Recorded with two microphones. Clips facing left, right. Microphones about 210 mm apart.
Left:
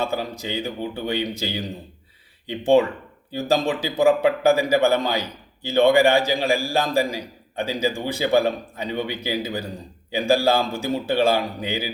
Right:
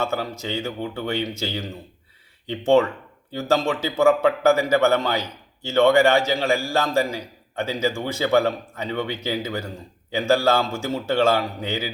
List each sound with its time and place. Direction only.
0.0 s a man's voice: 15° left (ahead or behind)